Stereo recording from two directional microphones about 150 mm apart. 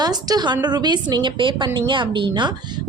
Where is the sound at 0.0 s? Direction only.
25° right (ahead or behind).